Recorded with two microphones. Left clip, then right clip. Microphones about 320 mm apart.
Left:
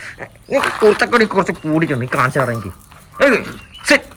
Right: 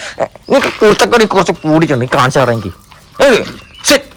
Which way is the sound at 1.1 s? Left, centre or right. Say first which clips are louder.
Right 5 dB; centre.